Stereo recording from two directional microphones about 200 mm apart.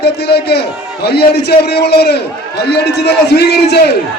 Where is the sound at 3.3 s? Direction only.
55° left (ahead or behind).